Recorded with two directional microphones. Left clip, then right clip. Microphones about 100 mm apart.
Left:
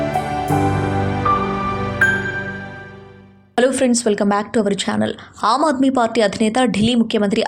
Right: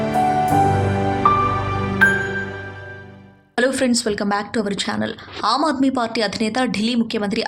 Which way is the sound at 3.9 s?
35° left (ahead or behind).